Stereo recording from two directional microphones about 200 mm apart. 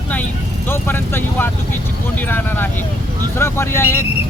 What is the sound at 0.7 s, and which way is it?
Speech, 10° left (ahead or behind).